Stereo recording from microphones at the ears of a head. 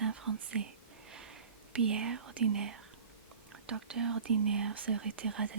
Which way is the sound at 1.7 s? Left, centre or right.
Right.